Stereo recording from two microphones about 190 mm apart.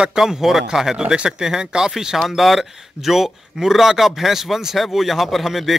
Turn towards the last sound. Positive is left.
turn(degrees=0)  # may be behind; listen again after turning